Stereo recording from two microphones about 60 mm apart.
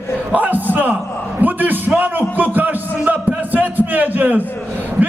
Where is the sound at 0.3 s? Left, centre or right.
Right.